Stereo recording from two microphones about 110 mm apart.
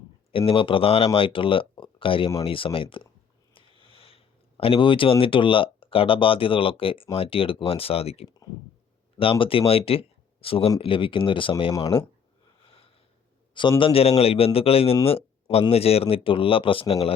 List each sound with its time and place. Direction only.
0.3 s a man's voice: 55° left (ahead or behind)
12.5 s sniff: 55° left (ahead or behind)
13.5 s a man's voice: 45° left (ahead or behind)